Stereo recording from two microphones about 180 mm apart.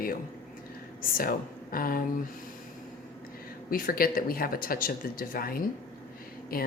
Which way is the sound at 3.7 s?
55° left (ahead or behind).